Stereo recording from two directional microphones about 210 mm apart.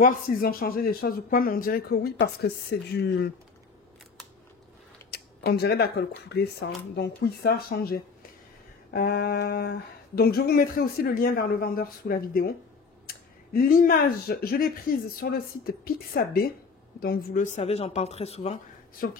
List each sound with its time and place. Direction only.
0.0 s speech: 45° left (ahead or behind)
5.1 s speech: 50° left (ahead or behind); by 18.6 s 30° left (ahead or behind)
19.0 s speech: 45° left (ahead or behind)